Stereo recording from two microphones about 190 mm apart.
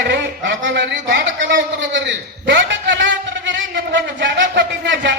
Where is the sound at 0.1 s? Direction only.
65° right (ahead or behind).